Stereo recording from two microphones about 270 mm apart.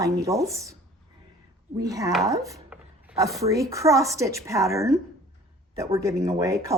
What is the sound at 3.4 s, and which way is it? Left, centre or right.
Speech, centre.